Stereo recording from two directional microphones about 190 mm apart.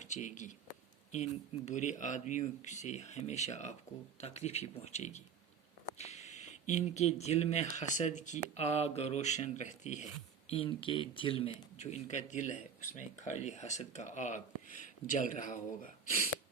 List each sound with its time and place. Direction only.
0.0 s speech: 40° left (ahead or behind)
10.5 s speech: 30° left (ahead or behind)